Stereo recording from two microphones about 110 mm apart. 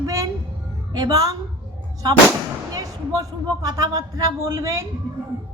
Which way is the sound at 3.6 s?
35° right (ahead or behind).